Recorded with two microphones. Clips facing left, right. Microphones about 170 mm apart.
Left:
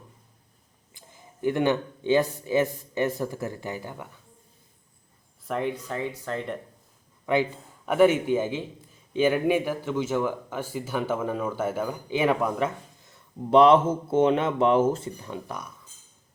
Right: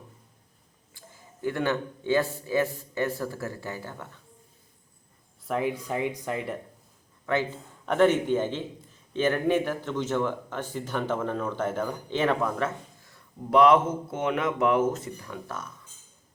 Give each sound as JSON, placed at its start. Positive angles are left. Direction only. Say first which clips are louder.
{"t": 0.9, "sound": "a man's voice", "louder": "left 3 dB", "side_deg": 20}
{"t": 5.5, "sound": "speech", "louder": "right 1 dB", "side_deg": -5}
{"t": 7.3, "sound": "a man's voice", "louder": "left 3 dB", "side_deg": 15}